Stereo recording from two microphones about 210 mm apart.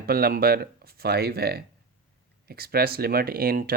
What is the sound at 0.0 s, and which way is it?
Speech, 45° right (ahead or behind).